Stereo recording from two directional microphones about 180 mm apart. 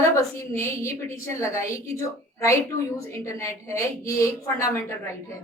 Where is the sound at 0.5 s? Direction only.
15° left (ahead or behind).